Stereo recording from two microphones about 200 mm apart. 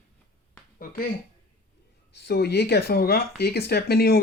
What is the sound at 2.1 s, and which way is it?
Speech, 55° left (ahead or behind).